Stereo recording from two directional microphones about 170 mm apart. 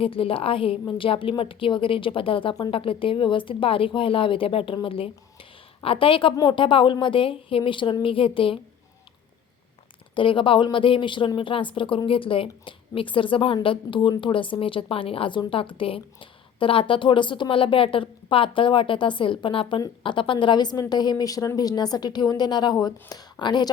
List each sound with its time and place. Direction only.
0.0 s a woman's voice: 30° left (ahead or behind)
10.2 s a woman's voice: 30° left (ahead or behind)